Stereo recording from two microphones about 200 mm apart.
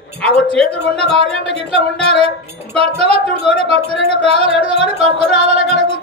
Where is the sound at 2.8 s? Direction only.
30° right (ahead or behind).